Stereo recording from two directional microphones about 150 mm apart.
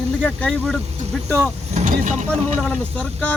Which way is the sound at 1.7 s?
55° right (ahead or behind).